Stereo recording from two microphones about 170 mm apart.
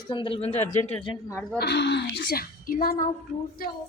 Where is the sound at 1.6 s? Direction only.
80° left; by 3.0 s 55° left (ahead or behind).